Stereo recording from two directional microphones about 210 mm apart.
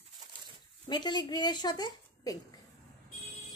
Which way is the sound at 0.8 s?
20° left (ahead or behind).